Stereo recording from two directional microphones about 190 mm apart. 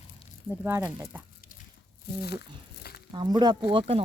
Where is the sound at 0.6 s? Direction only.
10° right (ahead or behind).